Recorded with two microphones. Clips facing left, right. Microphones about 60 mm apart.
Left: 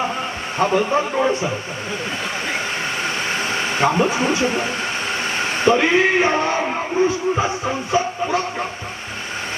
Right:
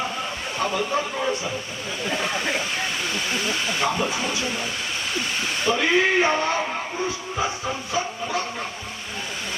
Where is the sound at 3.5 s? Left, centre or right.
Left.